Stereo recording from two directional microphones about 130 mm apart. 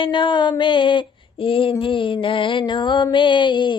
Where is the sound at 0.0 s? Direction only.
40° left (ahead or behind).